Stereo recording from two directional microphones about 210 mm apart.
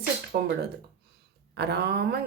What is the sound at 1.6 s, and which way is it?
Speech, 50° right (ahead or behind).